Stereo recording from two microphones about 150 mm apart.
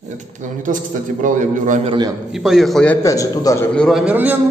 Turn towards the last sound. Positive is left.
turn(degrees=-10)  # may be behind; listen again after turning